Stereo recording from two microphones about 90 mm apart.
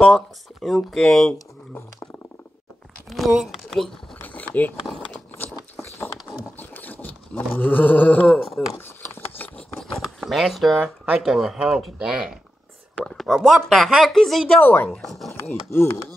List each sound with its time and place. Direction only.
0.0 s speech: centre (ahead or behind)
3.1 s speech: centre (ahead or behind)
4.2 s a sound: 15° left (ahead or behind)
4.8 s vehicle: 5° left (ahead or behind)
5.4 s biting: 20° left (ahead or behind)
6.6 s a sound: 20° left (ahead or behind)
8.3 s speech: centre (ahead or behind)
9.8 s a sound: centre (ahead or behind)
11.1 s speech: centre (ahead or behind)
12.9 s speech: 10° left (ahead or behind)
14.6 s speech: 20° left (ahead or behind)
15.0 s speech: centre (ahead or behind)